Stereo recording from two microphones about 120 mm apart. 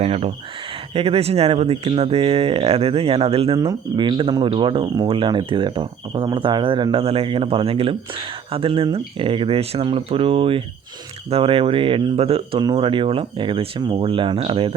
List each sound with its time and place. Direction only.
0.0 s speech: 60° right (ahead or behind)
12.7 s speech: 45° right (ahead or behind)